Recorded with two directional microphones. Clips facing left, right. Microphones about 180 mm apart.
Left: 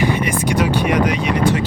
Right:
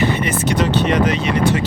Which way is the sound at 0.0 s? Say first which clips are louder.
Even; 10° left (ahead or behind).